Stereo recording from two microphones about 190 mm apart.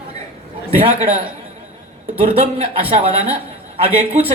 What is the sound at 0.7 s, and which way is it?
Speech, 30° right (ahead or behind).